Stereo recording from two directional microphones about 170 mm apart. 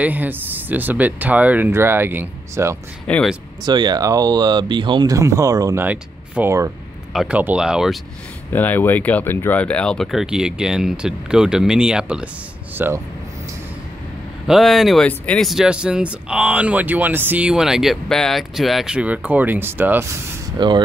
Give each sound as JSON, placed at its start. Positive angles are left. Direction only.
{"t": 0.0, "sound": "speech", "side_deg": -10}
{"t": 3.1, "sound": "speech", "side_deg": 5}
{"t": 3.6, "sound": "speech", "side_deg": -25}
{"t": 5.9, "sound": "speech", "side_deg": -10}
{"t": 8.5, "sound": "speech", "side_deg": 10}
{"t": 14.5, "sound": "speech", "side_deg": 0}
{"t": 20.5, "sound": "speech", "side_deg": -25}